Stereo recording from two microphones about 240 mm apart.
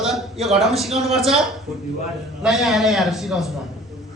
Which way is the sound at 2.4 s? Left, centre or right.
Centre.